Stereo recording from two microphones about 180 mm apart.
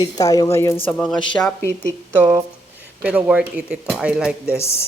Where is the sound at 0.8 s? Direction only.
5° left (ahead or behind).